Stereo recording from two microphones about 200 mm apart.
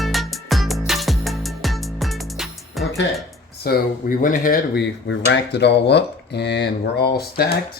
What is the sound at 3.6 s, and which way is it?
Speech, 50° left (ahead or behind).